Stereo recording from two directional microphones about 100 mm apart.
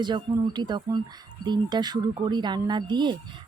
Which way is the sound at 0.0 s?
45° right (ahead or behind).